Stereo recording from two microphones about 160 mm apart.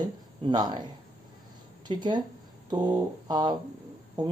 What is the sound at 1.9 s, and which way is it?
Speech, 25° right (ahead or behind).